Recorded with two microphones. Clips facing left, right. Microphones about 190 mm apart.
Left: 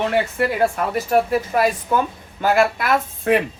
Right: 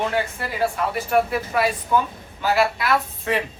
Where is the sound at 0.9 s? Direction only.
40° left (ahead or behind).